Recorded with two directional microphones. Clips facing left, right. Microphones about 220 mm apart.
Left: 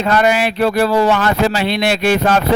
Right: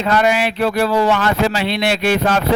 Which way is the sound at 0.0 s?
45° left (ahead or behind).